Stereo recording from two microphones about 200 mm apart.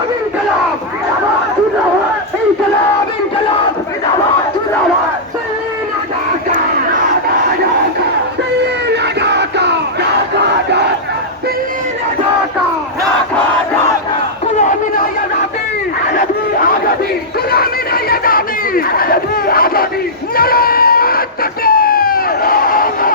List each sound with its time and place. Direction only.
8.6 s crowd: 60° right (ahead or behind)
17.5 s crowd: 50° left (ahead or behind)
20.3 s a sound: 50° left (ahead or behind)